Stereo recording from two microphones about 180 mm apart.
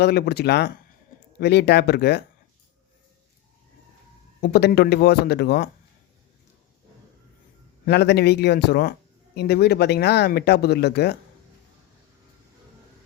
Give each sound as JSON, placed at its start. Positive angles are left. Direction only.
{"t": 0.0, "sound": "speech", "side_deg": 65}
{"t": 4.4, "sound": "speech", "side_deg": 60}
{"t": 7.9, "sound": "speech", "side_deg": 65}